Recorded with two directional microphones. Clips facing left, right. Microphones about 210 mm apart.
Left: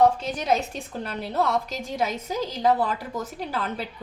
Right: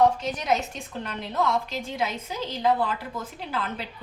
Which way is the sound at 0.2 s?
30° left (ahead or behind).